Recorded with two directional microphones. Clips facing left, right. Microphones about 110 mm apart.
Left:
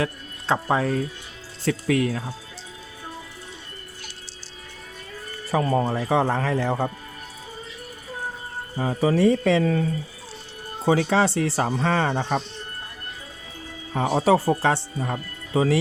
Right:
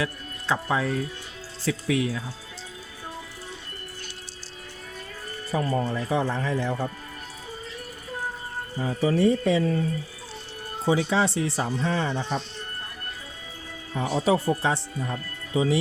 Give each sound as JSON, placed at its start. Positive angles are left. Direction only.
{"t": 0.0, "sound": "speech", "side_deg": 45}
{"t": 5.5, "sound": "speech", "side_deg": 90}
{"t": 8.8, "sound": "speech", "side_deg": 90}
{"t": 10.8, "sound": "speech", "side_deg": 60}
{"t": 11.3, "sound": "speech", "side_deg": 70}
{"t": 13.9, "sound": "speech", "side_deg": 55}